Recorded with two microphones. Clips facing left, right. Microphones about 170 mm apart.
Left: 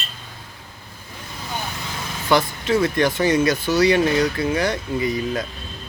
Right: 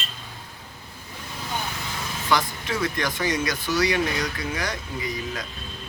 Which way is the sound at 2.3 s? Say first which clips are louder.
Left 7 dB; 25° left (ahead or behind).